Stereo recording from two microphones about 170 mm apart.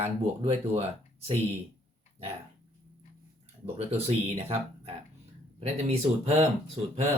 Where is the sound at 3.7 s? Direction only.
35° right (ahead or behind).